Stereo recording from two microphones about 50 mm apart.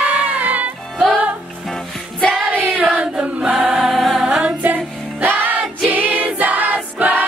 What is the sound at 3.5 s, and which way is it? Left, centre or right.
Choir, centre.